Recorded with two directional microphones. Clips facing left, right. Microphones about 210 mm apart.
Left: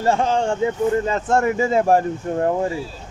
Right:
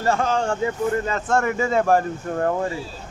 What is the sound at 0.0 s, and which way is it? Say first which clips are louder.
Speech: left 2 dB; 25° left (ahead or behind).